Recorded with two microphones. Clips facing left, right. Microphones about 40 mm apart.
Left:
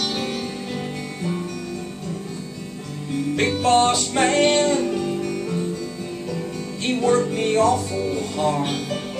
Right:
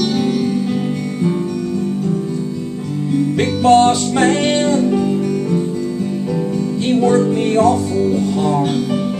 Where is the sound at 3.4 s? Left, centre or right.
Centre.